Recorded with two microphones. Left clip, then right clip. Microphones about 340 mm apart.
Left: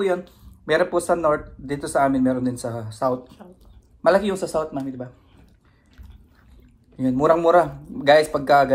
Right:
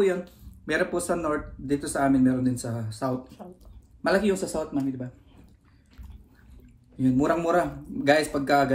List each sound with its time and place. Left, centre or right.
0.7 s speech: centre
3.4 s speech: centre
4.0 s speech: centre
7.0 s speech: centre